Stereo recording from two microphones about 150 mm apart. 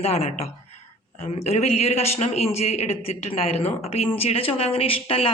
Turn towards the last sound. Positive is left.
turn(degrees=40)  # may be behind; listen again after turning